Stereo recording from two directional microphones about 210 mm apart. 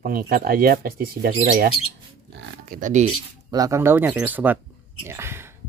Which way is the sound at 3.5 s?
15° right (ahead or behind).